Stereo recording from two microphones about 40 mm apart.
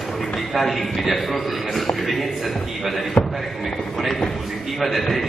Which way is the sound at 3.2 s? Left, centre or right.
Left.